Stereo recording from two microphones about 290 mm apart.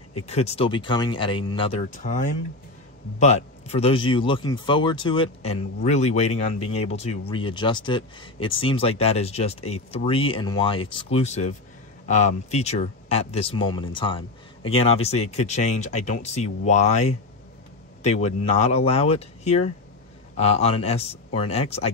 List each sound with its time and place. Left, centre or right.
0.3 s speech: left